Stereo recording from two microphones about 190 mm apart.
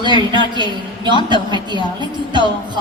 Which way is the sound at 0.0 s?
25° right (ahead or behind).